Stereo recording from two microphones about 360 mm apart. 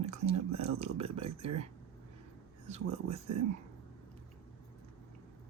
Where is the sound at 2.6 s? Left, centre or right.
Centre.